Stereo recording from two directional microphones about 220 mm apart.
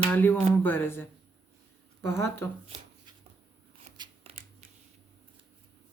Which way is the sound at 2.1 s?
10° left (ahead or behind).